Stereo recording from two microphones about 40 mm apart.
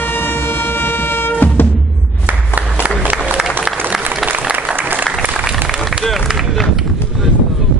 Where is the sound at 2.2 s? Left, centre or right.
Right.